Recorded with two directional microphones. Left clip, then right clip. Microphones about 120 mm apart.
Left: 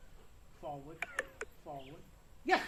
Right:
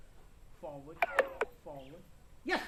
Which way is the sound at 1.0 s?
5° right (ahead or behind).